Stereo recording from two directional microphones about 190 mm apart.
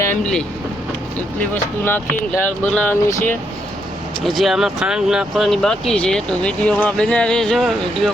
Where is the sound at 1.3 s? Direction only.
10° left (ahead or behind).